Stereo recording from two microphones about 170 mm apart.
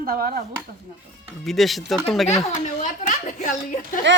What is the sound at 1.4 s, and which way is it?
Speech, centre (ahead or behind).